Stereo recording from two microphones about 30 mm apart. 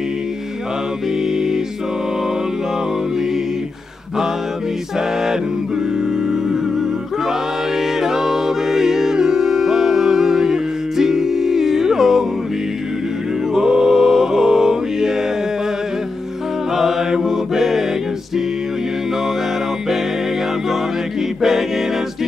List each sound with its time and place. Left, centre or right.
8.0 s music: centre
13.6 s music: centre
16.7 s mantra: centre
21.4 s music: centre